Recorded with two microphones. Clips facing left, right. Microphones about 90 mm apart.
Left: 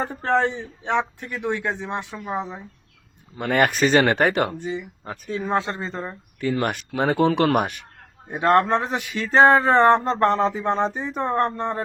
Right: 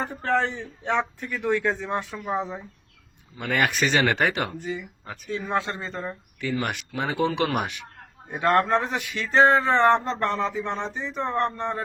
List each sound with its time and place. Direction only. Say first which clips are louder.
0.0 s a man's voice: left 3 dB; 30° left (ahead or behind)
0.4 s speech: left 3 dB; 15° left (ahead or behind)
3.3 s speech: left 4 dB; 50° left (ahead or behind)
4.5 s a man's voice: left 3 dB; 20° left (ahead or behind)
5.0 s speech: left 3 dB; 35° left (ahead or behind)
6.5 s speech: left 4 dB; 45° left (ahead or behind)
8.3 s speech: left 3 dB; 30° left (ahead or behind)